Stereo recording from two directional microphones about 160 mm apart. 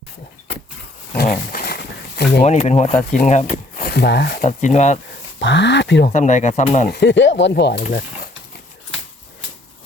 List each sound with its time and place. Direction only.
1.1 s a sound: 75° left (ahead or behind)
2.4 s speech: 45° left (ahead or behind)
3.8 s speech: 90° left
4.4 s speech: 45° left (ahead or behind)
5.4 s speech: 90° left
6.1 s speech: 50° left (ahead or behind)
6.9 s speech: 90° left